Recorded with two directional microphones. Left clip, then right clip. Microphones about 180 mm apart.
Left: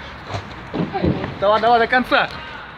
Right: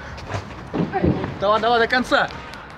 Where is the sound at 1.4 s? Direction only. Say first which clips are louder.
Left 3 dB; 30° left (ahead or behind); by 2.3 s 15° left (ahead or behind).